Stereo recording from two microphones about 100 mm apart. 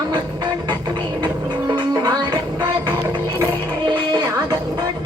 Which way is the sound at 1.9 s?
40° right (ahead or behind).